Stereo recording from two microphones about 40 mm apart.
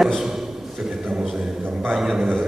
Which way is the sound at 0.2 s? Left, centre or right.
Centre.